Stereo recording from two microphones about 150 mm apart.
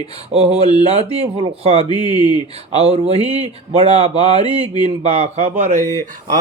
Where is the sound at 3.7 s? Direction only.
40° right (ahead or behind).